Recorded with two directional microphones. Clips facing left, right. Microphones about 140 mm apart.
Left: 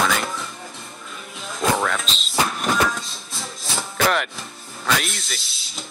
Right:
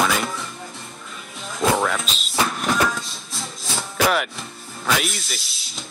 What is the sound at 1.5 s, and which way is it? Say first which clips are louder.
Music: right 1 dB; 5° right (ahead or behind).